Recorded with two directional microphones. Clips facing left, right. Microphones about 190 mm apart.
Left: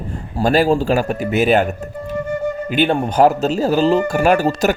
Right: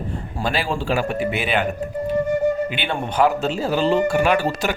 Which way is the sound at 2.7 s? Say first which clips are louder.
Left 8 dB; 40° left (ahead or behind).